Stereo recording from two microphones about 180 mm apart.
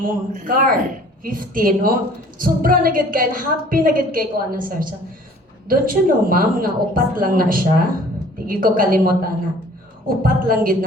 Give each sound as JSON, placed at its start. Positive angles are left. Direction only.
{"t": 0.0, "sound": "a woman's voice", "side_deg": -50}